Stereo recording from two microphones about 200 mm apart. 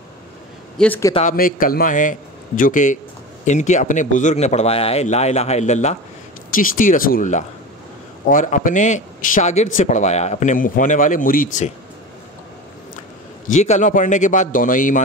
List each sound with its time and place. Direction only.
0.7 s speech: 10° left (ahead or behind)
1.3 s a man's voice: 45° left (ahead or behind)
13.5 s speech: 35° left (ahead or behind)